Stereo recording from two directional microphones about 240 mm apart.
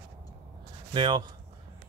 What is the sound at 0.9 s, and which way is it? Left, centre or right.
Speech, centre.